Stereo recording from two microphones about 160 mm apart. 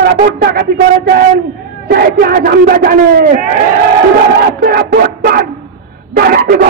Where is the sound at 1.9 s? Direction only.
75° right (ahead or behind).